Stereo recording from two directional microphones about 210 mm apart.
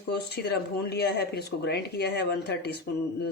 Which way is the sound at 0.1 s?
50° left (ahead or behind).